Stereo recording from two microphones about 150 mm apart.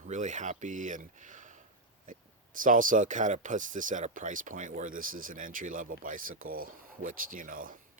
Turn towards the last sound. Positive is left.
turn(degrees=-65)  # may be behind; listen again after turning